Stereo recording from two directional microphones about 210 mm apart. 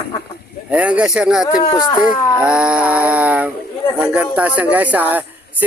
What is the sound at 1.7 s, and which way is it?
Speech, 15° left (ahead or behind).